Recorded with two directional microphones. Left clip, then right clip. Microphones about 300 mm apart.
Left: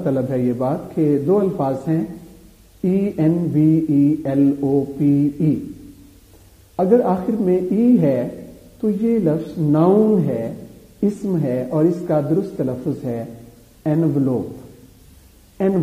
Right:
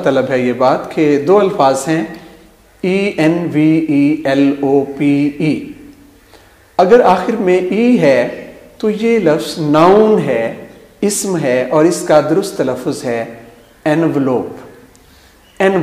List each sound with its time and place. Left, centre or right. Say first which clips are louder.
0.0 s a man's voice: right 8 dB; centre
3.7 s speech: right 4 dB; right
4.2 s a man's voice: right 6 dB; centre
4.6 s a sound: right 7 dB; right
5.1 s speech: right 4 dB; right
6.8 s a man's voice: right 8 dB; centre
15.5 s a sound: right 8 dB; centre